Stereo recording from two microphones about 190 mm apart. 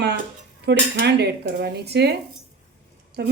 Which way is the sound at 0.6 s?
65° right (ahead or behind).